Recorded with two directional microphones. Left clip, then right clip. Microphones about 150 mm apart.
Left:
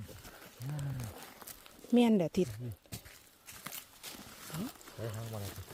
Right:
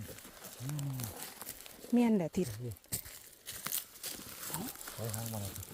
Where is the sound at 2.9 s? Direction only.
45° right (ahead or behind).